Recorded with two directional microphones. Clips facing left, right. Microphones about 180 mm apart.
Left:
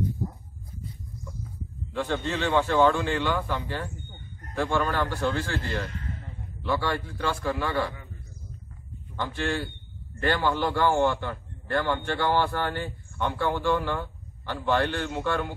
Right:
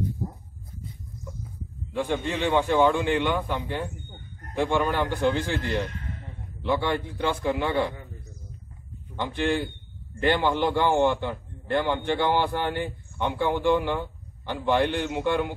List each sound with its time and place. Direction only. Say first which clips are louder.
2.0 s a man's voice: right 1 dB; 15° right (ahead or behind)
9.1 s a man's voice: right 3 dB; 20° right (ahead or behind)